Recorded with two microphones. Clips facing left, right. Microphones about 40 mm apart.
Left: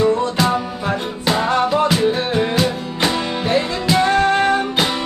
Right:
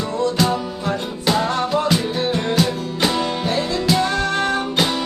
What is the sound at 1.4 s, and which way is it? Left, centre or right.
Music, left.